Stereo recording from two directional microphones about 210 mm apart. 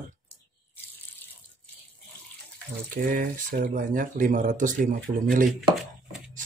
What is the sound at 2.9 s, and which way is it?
Speech, 40° right (ahead or behind).